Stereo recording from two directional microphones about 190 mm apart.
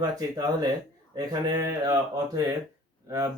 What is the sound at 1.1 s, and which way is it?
Speech, 20° right (ahead or behind).